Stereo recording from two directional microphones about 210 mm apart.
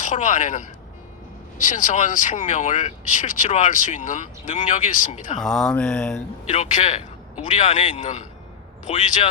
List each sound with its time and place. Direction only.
0.0 s speech: 35° left (ahead or behind)
5.4 s speech: 5° left (ahead or behind)
6.5 s speech: 30° left (ahead or behind)